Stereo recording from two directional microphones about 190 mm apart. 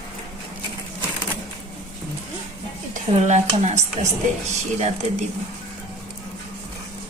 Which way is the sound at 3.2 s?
40° right (ahead or behind).